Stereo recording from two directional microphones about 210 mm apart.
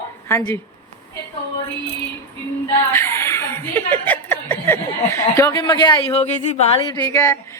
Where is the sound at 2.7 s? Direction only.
10° left (ahead or behind).